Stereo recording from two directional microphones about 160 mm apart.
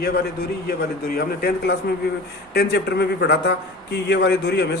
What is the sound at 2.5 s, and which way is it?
A man's voice, 90° left.